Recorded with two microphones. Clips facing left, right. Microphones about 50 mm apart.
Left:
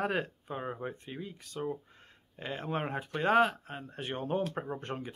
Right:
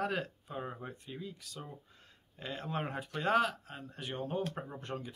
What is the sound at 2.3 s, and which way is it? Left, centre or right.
Speech, left.